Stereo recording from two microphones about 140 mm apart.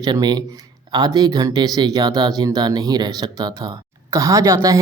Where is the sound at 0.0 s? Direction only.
30° right (ahead or behind).